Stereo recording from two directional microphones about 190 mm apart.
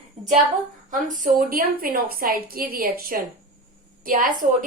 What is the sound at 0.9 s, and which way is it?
A woman's voice, 45° right (ahead or behind).